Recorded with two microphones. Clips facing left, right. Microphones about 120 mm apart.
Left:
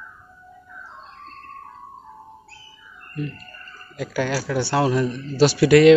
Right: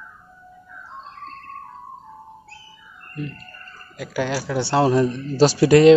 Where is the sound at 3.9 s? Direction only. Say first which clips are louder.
Even; 15° right (ahead or behind).